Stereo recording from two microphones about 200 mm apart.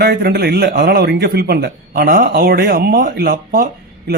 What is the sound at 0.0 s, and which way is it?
Speech, 55° right (ahead or behind).